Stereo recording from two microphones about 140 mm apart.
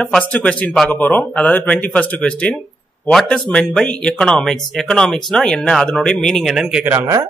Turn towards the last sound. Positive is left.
turn(degrees=-20)  # may be behind; listen again after turning